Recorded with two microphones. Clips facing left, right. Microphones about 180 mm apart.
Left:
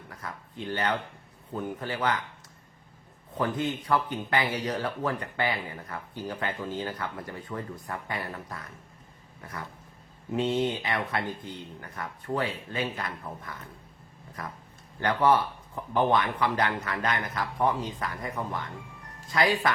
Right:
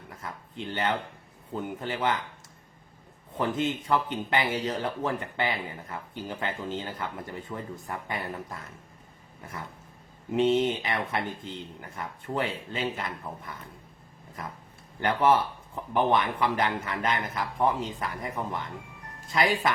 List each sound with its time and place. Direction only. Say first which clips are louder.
0.1 s speech: even; 25° right (ahead or behind)
3.3 s speech: right 1 dB; 20° right (ahead or behind)
10.3 s speech: right 3 dB; 20° right (ahead or behind)
15.0 s speech: even; 25° right (ahead or behind)